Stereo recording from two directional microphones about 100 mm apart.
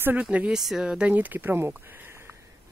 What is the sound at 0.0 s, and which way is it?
Speech, 15° right (ahead or behind).